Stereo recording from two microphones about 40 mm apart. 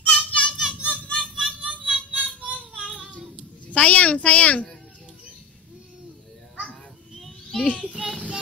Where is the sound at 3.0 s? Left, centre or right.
Left.